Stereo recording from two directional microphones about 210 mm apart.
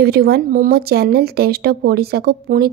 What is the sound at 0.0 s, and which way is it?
A woman's voice, 50° right (ahead or behind).